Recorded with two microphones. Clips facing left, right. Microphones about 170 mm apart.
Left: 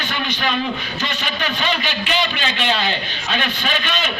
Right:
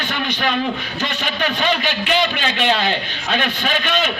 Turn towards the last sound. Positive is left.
turn(degrees=-50)  # may be behind; listen again after turning